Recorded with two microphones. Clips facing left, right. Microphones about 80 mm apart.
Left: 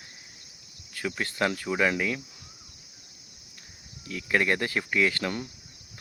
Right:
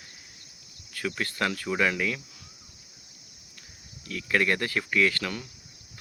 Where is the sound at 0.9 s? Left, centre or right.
Centre.